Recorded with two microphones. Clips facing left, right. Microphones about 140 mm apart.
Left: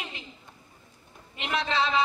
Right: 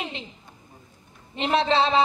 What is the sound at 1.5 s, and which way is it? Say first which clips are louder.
Speech: right 6 dB; 30° right (ahead or behind).